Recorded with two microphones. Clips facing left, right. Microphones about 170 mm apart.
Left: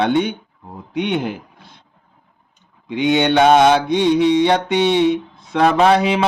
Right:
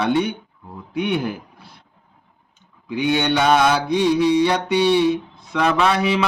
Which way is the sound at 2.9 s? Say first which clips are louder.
Left 4 dB; 20° left (ahead or behind).